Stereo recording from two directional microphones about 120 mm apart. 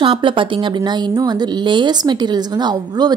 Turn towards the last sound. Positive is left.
turn(degrees=-35)  # may be behind; listen again after turning